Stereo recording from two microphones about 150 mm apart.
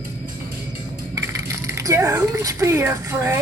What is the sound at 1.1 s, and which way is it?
Speech, 20° right (ahead or behind).